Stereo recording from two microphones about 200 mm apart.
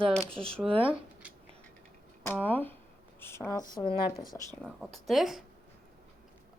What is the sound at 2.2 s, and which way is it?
Speech, 10° left (ahead or behind).